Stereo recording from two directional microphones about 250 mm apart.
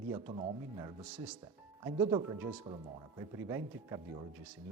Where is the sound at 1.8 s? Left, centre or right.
Centre.